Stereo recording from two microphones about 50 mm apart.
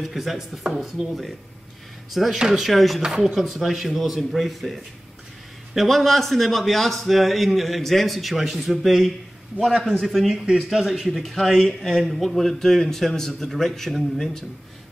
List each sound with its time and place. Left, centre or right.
0.0 s a man's voice: centre
2.3 s a man's voice: centre
5.8 s a man's voice: centre
10.3 s a man's voice: centre